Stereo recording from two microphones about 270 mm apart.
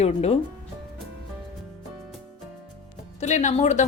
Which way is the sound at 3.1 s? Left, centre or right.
Left.